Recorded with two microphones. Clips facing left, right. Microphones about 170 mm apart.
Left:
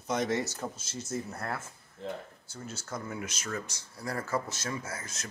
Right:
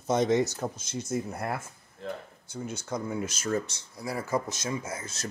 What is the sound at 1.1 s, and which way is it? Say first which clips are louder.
Speech: right 4 dB; 15° right (ahead or behind).